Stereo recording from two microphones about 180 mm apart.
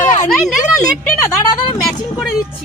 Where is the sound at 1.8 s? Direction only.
Centre (ahead or behind).